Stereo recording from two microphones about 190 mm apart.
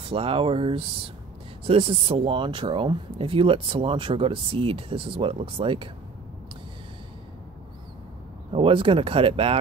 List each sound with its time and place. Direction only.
0.0 s speech: 30° right (ahead or behind)
8.5 s speech: 30° right (ahead or behind)